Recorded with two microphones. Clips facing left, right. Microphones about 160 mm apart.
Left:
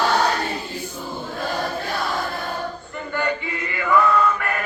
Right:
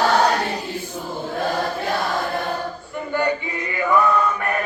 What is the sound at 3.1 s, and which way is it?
Male singing, 15° right (ahead or behind).